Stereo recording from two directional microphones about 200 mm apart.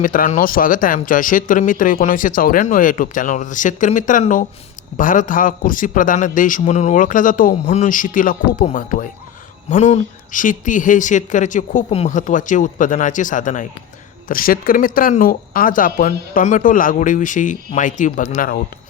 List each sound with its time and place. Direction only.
0.0 s speech: 40° left (ahead or behind)